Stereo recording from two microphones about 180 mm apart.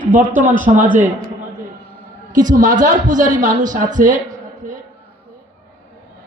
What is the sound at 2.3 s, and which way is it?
A woman's voice, 45° right (ahead or behind).